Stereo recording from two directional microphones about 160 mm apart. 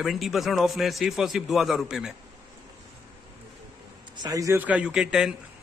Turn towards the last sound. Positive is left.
turn(degrees=-5)  # may be behind; listen again after turning